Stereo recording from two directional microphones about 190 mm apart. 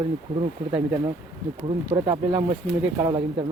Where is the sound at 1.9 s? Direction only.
25° right (ahead or behind).